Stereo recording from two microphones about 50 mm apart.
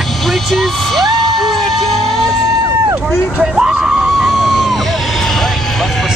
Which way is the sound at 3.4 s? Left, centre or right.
Centre.